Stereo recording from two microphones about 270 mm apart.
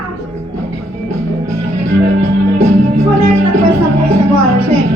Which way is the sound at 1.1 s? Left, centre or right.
Right.